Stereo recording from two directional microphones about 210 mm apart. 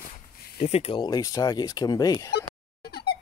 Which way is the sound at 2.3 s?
50° left (ahead or behind).